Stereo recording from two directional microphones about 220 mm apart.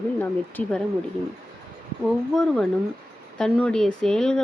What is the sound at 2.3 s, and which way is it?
Speech, centre (ahead or behind).